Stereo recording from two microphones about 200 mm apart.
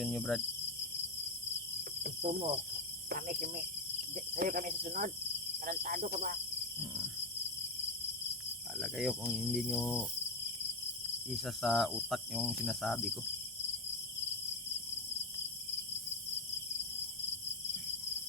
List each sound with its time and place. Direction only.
0.0 s cricket: centre (ahead or behind)
2.2 s cricket: 30° right (ahead or behind)
3.1 s cricket: 45° right (ahead or behind)
8.8 s cricket: centre (ahead or behind)
11.3 s cricket: centre (ahead or behind)